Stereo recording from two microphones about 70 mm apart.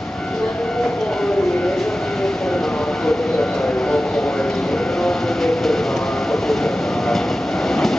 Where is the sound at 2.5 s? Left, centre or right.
Centre.